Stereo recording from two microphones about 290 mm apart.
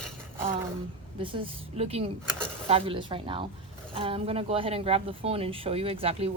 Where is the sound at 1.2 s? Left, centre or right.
Centre.